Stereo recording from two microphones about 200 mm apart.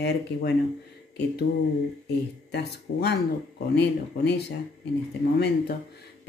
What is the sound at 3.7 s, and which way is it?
Speech, 55° left (ahead or behind).